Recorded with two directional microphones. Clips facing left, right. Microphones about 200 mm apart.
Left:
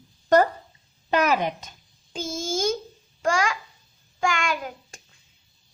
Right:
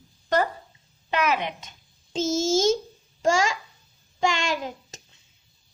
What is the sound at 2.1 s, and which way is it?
A child's voice, 25° right (ahead or behind).